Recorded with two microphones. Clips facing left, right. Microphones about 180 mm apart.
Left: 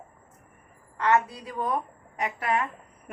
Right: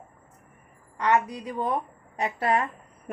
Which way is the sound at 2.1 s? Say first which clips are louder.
Right 3 dB; 30° right (ahead or behind).